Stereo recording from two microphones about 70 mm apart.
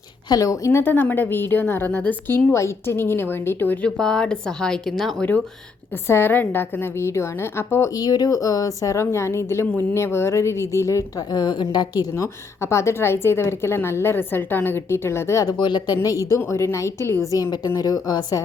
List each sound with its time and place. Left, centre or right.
0.3 s a woman's voice: left
0.7 s a woman's voice: left
2.5 s a woman's voice: left
3.8 s speech: centre
6.1 s a woman's voice: left
7.9 s speech: left
11.3 s a woman's voice: left
12.1 s a woman's voice: left
15.4 s a woman's voice: left
16.0 s a woman's voice: left
17.3 s a woman's voice: left